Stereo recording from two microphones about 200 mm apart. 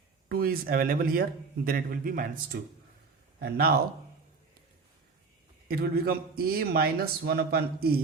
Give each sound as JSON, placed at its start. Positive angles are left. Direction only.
{"t": 0.3, "sound": "a man's voice", "side_deg": -45}
{"t": 5.6, "sound": "a man's voice", "side_deg": -50}